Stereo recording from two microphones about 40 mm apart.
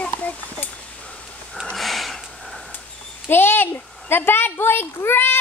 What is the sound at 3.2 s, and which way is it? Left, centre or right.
A woman's voice, left.